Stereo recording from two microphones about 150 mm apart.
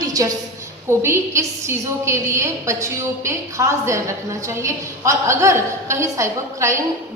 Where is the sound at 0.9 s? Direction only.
15° right (ahead or behind).